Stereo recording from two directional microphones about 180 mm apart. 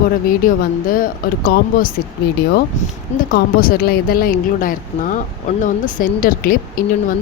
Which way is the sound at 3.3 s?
55° left (ahead or behind).